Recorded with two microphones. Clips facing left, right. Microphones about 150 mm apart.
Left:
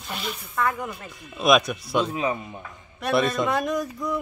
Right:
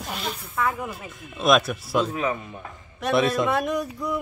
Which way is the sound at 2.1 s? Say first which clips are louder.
Even; 20° left (ahead or behind).